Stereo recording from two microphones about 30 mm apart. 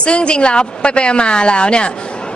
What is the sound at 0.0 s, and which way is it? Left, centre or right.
A woman's voice, left.